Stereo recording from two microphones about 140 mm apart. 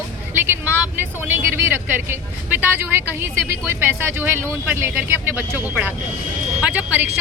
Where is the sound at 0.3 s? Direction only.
15° right (ahead or behind).